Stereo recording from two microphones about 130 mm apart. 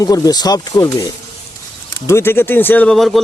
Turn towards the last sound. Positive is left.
turn(degrees=0)  # may be behind; listen again after turning